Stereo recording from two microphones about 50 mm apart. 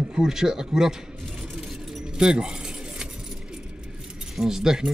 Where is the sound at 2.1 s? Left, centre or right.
Centre.